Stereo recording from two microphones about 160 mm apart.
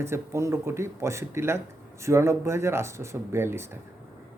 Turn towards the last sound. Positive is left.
turn(degrees=-15)  # may be behind; listen again after turning